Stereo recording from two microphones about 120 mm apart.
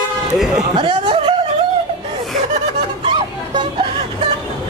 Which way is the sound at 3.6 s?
50° right (ahead or behind).